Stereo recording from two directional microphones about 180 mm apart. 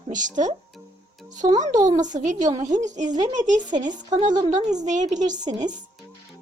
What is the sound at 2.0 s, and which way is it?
Speech, 45° right (ahead or behind).